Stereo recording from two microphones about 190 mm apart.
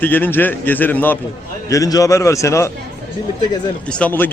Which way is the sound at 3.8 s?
5° left (ahead or behind).